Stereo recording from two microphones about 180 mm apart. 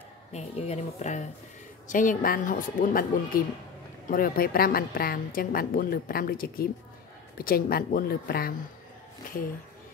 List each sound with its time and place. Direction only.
0.3 s a woman's voice: 35° left (ahead or behind); by 8.5 s 55° left (ahead or behind)